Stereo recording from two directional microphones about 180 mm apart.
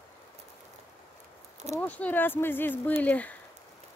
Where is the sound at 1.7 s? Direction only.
10° left (ahead or behind).